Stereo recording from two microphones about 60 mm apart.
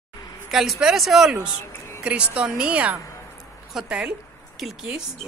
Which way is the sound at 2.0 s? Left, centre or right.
Centre.